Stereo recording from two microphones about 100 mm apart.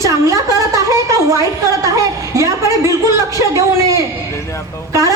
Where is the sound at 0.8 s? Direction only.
35° right (ahead or behind).